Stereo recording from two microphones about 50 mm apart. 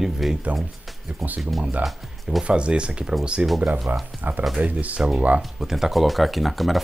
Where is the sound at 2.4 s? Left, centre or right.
Right.